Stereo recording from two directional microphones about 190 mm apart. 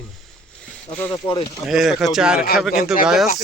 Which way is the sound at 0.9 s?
10° left (ahead or behind).